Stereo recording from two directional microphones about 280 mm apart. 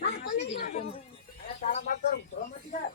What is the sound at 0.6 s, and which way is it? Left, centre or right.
Speech, left.